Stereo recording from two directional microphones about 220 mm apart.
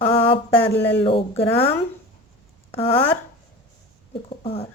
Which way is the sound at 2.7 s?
25° left (ahead or behind).